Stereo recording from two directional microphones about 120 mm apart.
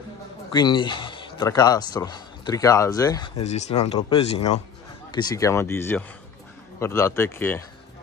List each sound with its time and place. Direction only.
0.5 s a sound: 40° left (ahead or behind)
1.5 s speech: 30° left (ahead or behind)
3.4 s speech: 70° left (ahead or behind)
5.1 s speech: 30° left (ahead or behind)